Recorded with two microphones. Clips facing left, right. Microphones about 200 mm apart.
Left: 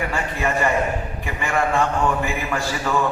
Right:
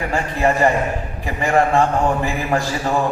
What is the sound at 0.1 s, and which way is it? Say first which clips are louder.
A man's voice: right 5 dB; 35° right (ahead or behind).